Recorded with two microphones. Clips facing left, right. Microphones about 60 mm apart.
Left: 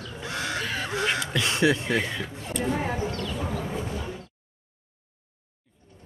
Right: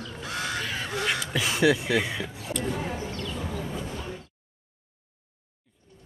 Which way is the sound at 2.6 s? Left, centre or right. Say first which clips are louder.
Left 4 dB; left.